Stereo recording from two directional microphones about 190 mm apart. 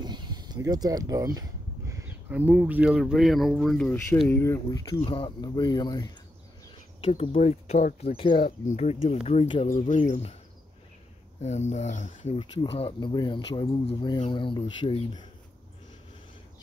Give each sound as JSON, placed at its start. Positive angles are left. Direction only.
{"t": 0.0, "sound": "speech", "side_deg": -25}
{"t": 7.0, "sound": "speech", "side_deg": 35}
{"t": 8.3, "sound": "speech", "side_deg": 45}
{"t": 11.4, "sound": "speech", "side_deg": 35}
{"t": 12.4, "sound": "speech", "side_deg": 30}